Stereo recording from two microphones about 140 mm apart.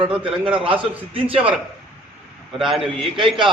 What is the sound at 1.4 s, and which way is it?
Speech, 10° right (ahead or behind).